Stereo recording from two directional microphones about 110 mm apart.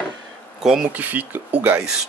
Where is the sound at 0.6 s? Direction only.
10° right (ahead or behind).